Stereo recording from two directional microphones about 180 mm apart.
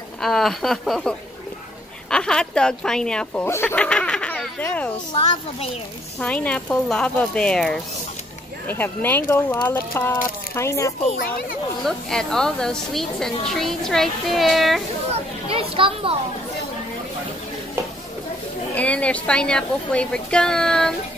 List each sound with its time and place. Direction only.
0.2 s speech: centre (ahead or behind)
5.1 s a child's voice: 30° left (ahead or behind)
6.1 s speech: 5° left (ahead or behind)
11.8 s speech: 5° left (ahead or behind)
15.4 s a child's voice: 30° right (ahead or behind)
18.8 s speech: 10° left (ahead or behind)